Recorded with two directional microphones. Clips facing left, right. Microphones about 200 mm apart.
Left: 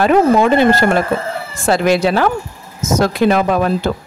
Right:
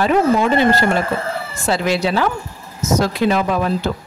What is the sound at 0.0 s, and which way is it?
Speech, 55° left (ahead or behind).